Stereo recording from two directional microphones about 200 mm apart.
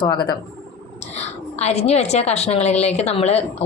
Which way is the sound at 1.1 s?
35° left (ahead or behind).